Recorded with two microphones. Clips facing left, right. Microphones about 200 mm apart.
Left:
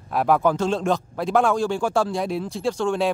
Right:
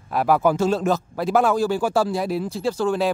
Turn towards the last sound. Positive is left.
turn(degrees=0)  # may be behind; listen again after turning